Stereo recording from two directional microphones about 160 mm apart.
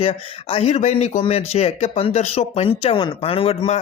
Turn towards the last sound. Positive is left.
turn(degrees=40)  # may be behind; listen again after turning